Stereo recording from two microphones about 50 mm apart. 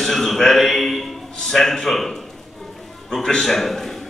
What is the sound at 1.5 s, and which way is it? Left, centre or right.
A man's voice, centre.